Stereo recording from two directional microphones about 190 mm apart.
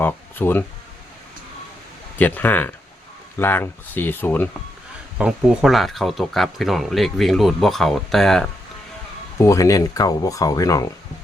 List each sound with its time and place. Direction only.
0.0 s speech: 10° left (ahead or behind)
2.1 s speech: 10° left (ahead or behind)
5.1 s speech: 5° right (ahead or behind)
9.4 s speech: 15° left (ahead or behind)